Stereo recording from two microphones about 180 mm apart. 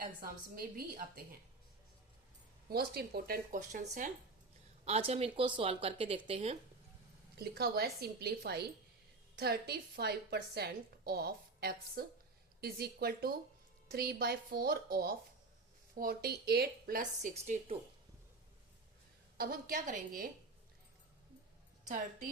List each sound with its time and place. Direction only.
0.0 s a woman's voice: 55° right (ahead or behind)
2.6 s a woman's voice: 60° right (ahead or behind); by 6.6 s 35° right (ahead or behind)
7.3 s a woman's voice: 60° right (ahead or behind); by 17.7 s 40° right (ahead or behind)
19.4 s a woman's voice: 55° right (ahead or behind)